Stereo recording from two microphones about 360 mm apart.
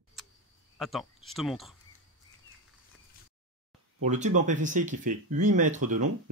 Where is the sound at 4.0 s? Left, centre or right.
Centre.